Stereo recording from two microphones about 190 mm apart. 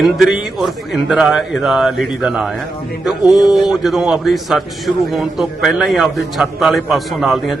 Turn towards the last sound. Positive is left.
turn(degrees=0)  # may be behind; listen again after turning